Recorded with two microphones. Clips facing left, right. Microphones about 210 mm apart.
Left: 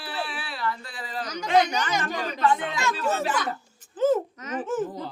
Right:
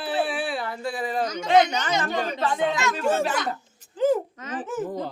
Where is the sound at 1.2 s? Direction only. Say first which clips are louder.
Right 2 dB; 25° right (ahead or behind).